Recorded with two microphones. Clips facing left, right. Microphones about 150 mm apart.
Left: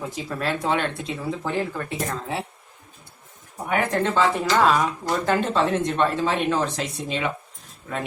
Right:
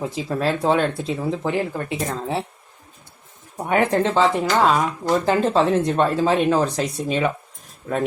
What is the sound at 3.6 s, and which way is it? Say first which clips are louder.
Speech: right 4 dB; 30° right (ahead or behind).